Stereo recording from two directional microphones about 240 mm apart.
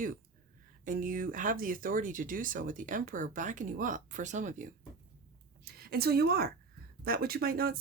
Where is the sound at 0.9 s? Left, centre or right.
Right.